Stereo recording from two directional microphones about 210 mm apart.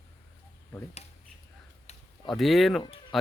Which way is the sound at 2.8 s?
20° left (ahead or behind).